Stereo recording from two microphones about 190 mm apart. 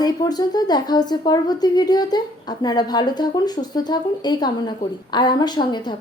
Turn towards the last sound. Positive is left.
turn(degrees=25)  # may be behind; listen again after turning